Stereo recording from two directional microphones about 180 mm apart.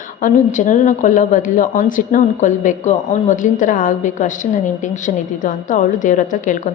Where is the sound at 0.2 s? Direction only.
50° left (ahead or behind).